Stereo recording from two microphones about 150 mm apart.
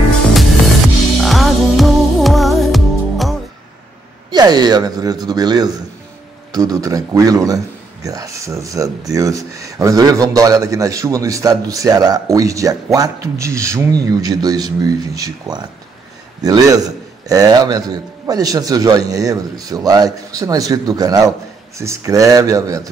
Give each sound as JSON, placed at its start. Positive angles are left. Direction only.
{"t": 1.1, "sound": "music", "side_deg": 0}
{"t": 4.3, "sound": "a man's voice", "side_deg": -25}